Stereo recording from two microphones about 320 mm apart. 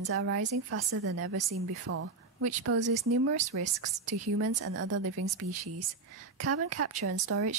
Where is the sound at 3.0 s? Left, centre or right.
Right.